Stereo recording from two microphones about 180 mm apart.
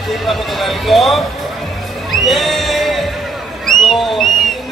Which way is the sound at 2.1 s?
Centre (ahead or behind).